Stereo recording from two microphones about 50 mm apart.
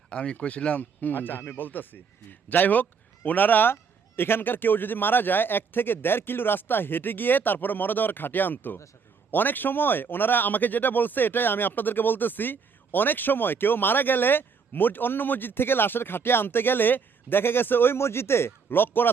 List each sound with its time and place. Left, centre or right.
0.1 s speech: left
0.8 s a man's voice: left
17.9 s a man's voice: left